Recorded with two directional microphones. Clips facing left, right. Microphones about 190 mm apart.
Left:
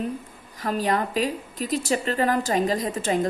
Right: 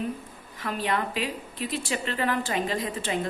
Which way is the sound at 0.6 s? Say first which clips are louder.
Left 4 dB; 40° left (ahead or behind).